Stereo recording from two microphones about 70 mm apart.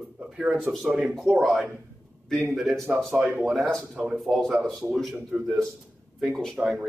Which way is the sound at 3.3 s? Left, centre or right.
Centre.